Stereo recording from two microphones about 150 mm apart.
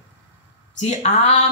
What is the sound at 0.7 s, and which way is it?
Speech, 45° left (ahead or behind).